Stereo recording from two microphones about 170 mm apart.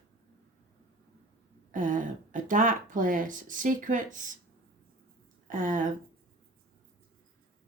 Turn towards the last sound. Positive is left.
turn(degrees=-50)  # may be behind; listen again after turning